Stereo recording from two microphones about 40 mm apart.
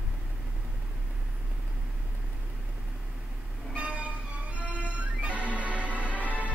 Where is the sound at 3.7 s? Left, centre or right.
Right.